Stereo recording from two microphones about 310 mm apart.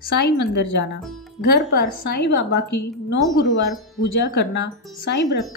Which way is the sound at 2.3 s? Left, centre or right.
Left.